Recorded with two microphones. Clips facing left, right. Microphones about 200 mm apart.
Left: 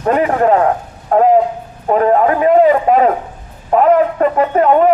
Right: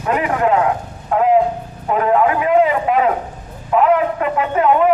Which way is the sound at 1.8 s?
40° left (ahead or behind).